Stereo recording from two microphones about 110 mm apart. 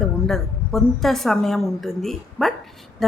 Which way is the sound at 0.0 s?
5° left (ahead or behind).